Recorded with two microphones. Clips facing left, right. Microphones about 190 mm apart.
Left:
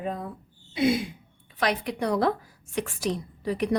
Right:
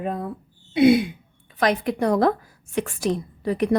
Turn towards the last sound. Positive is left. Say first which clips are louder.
# right 4 dB
turn(degrees=-50)  # may be behind; listen again after turning